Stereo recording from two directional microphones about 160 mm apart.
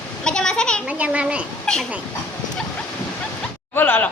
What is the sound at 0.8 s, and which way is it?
A child's voice, 10° right (ahead or behind).